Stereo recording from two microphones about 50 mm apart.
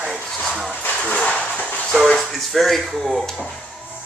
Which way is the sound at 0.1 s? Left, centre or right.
Centre.